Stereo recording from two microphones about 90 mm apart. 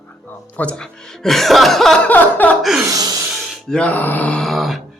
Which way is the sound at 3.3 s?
Centre (ahead or behind).